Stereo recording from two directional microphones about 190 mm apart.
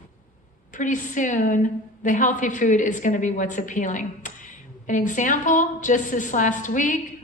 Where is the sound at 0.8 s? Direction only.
40° left (ahead or behind).